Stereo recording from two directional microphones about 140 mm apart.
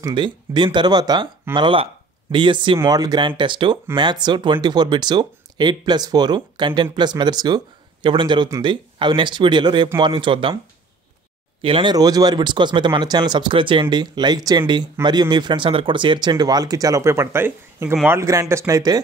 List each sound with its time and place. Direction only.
0.0 s speech: 35° right (ahead or behind)
11.6 s speech: 35° right (ahead or behind)